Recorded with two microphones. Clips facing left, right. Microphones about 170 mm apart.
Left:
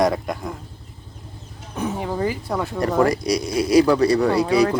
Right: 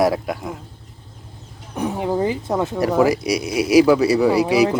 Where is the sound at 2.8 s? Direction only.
5° right (ahead or behind).